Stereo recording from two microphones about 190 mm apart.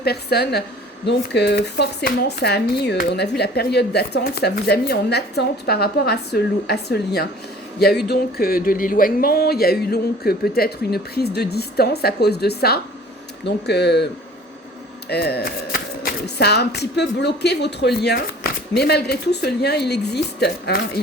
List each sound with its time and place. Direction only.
0.0 s speech: 60° left (ahead or behind)
15.1 s speech: 60° left (ahead or behind)